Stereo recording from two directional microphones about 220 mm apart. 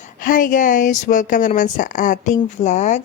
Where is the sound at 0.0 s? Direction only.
40° left (ahead or behind).